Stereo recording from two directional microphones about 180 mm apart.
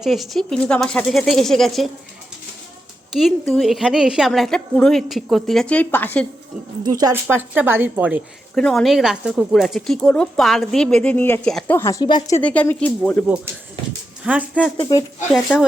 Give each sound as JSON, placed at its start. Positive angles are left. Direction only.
{"t": 0.0, "sound": "speech", "side_deg": 0}
{"t": 3.2, "sound": "speech", "side_deg": 0}
{"t": 6.8, "sound": "speech", "side_deg": -20}
{"t": 8.5, "sound": "speech", "side_deg": 0}
{"t": 12.4, "sound": "a woman's voice", "side_deg": 10}
{"t": 13.2, "sound": "speech", "side_deg": -5}
{"t": 14.8, "sound": "speech", "side_deg": 20}
{"t": 15.3, "sound": "speech", "side_deg": 0}